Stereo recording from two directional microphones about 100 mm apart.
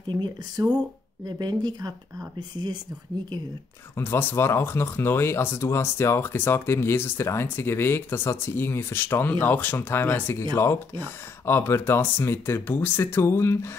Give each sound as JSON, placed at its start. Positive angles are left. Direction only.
{"t": 0.1, "sound": "speech", "side_deg": -45}
{"t": 3.9, "sound": "speech", "side_deg": 20}